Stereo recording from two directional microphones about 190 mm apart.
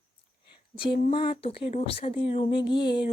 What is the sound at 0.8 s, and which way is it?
A woman's voice, 25° left (ahead or behind).